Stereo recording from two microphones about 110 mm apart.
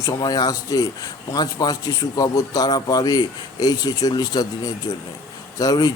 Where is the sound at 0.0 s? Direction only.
35° left (ahead or behind).